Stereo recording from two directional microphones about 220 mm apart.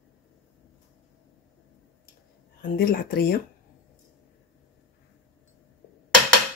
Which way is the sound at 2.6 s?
40° left (ahead or behind).